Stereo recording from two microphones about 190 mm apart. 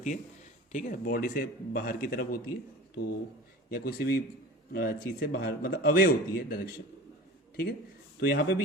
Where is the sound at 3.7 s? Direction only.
50° left (ahead or behind).